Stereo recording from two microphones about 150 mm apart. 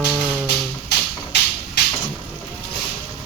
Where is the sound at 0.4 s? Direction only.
90° left.